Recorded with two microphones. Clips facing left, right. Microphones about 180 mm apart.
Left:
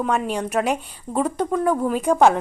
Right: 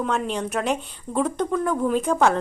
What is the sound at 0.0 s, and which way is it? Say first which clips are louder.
Speech: left 2 dB; 5° left (ahead or behind).